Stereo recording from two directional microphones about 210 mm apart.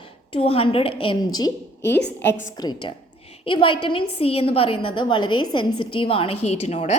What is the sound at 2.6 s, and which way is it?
A woman's voice, 20° left (ahead or behind).